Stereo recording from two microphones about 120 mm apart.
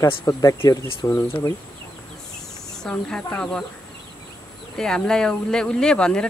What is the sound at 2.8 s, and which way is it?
Speech, 5° left (ahead or behind).